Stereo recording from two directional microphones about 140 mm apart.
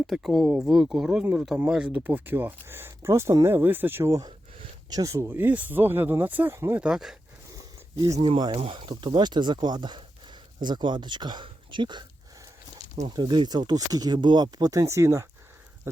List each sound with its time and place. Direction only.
0.1 s speech: 5° right (ahead or behind); by 4.3 s 20° right (ahead or behind)
4.3 s a sound: 40° right (ahead or behind)
4.9 s speech: 20° right (ahead or behind)
6.8 s speech: 5° right (ahead or behind)
7.5 s a sound: 25° right (ahead or behind)
8.2 s speech: 35° right (ahead or behind)
13.1 s speech: 30° right (ahead or behind)